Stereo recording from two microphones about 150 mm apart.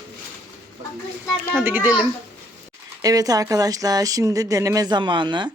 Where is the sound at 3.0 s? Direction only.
25° right (ahead or behind).